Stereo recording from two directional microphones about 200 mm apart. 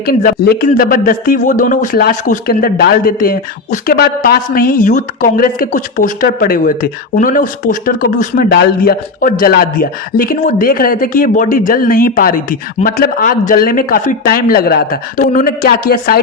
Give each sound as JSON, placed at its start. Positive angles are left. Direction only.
{"t": 0.0, "sound": "speech", "side_deg": 45}